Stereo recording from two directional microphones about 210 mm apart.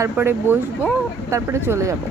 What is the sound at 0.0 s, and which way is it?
Speech, 10° right (ahead or behind).